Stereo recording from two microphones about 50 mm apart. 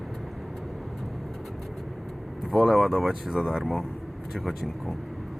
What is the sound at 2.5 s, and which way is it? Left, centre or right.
Speech, centre.